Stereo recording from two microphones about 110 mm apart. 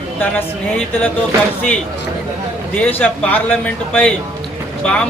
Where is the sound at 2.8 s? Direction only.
15° left (ahead or behind).